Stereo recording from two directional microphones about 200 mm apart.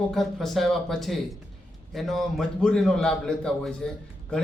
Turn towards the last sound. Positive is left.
turn(degrees=5)  # may be behind; listen again after turning